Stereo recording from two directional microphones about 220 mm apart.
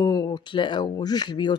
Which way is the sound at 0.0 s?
15° left (ahead or behind).